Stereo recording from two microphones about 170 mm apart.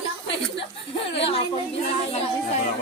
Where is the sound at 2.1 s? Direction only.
40° left (ahead or behind).